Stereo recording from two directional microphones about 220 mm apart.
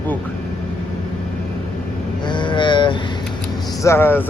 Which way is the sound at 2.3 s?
20° left (ahead or behind).